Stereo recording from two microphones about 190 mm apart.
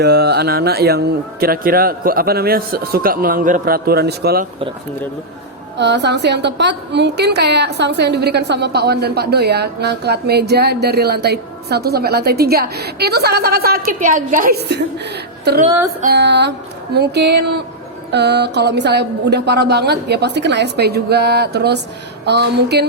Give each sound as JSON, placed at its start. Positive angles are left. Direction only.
{"t": 0.0, "sound": "speech", "side_deg": -55}
{"t": 5.7, "sound": "a woman's voice", "side_deg": -65}
{"t": 16.1, "sound": "a woman's voice", "side_deg": -65}